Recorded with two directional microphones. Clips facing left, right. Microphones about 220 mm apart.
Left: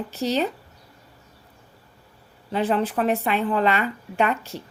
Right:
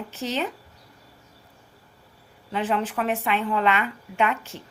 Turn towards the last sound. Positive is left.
turn(degrees=35)  # may be behind; listen again after turning